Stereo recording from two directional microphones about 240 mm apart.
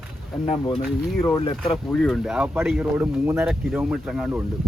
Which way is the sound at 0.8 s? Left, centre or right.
Centre.